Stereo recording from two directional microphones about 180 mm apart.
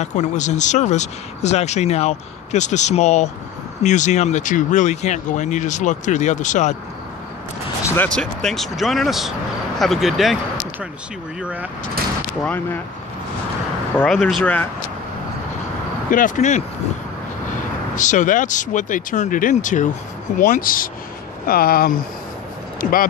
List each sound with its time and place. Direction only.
0.0 s speech: 40° left (ahead or behind)
7.8 s speech: 10° left (ahead or behind)
11.4 s speech: 10° right (ahead or behind)
12.4 s speech: 10° left (ahead or behind)
13.9 s speech: 5° left (ahead or behind)
16.1 s speech: 45° left (ahead or behind)
17.9 s speech: 45° left (ahead or behind)